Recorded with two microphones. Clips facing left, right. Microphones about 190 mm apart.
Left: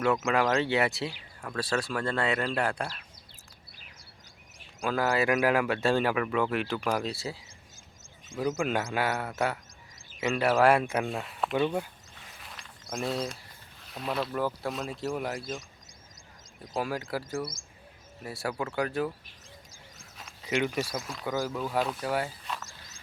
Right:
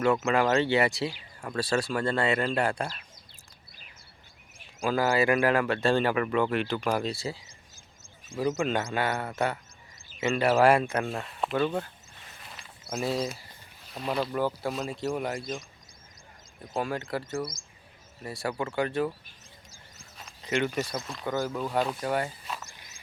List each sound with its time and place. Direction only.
0.0 s speech: centre (ahead or behind)
4.8 s speech: centre (ahead or behind)
11.5 s speech: 15° left (ahead or behind)
12.4 s a sound: centre (ahead or behind)
13.9 s speech: centre (ahead or behind)
16.7 s speech: 5° left (ahead or behind)
20.1 s speech: centre (ahead or behind)
22.7 s a sound: 15° right (ahead or behind)